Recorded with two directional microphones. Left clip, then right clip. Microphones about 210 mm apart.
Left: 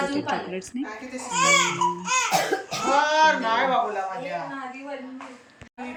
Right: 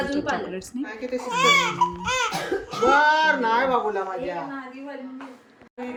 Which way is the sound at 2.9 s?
30° right (ahead or behind).